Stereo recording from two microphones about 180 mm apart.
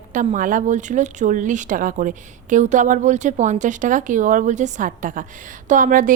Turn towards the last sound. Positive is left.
turn(degrees=-50)  # may be behind; listen again after turning